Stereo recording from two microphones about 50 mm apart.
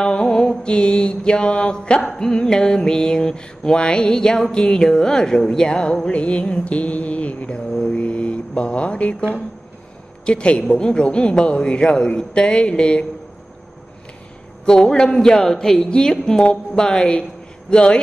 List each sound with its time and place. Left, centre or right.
0.0 s mantra: centre
7.5 s mantra: centre
10.2 s speech: left
14.7 s mantra: centre
17.6 s speech: left